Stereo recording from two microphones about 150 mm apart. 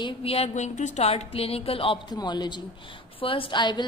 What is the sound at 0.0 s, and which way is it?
A woman's voice, 40° left (ahead or behind).